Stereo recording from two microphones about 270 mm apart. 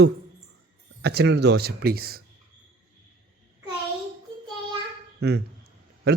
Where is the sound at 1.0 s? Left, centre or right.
Right.